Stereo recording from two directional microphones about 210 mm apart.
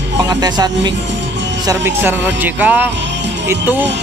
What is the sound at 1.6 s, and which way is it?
Music, 15° right (ahead or behind).